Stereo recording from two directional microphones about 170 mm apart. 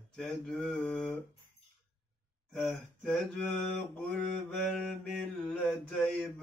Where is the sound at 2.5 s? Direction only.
Centre (ahead or behind).